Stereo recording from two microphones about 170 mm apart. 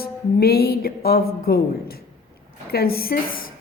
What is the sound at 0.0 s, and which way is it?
A woman's voice, 65° left (ahead or behind).